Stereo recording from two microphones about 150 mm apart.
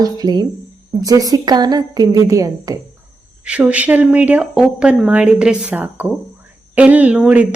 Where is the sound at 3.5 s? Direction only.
10° right (ahead or behind).